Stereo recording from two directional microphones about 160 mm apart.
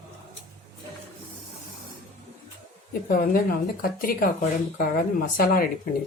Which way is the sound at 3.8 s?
65° left (ahead or behind).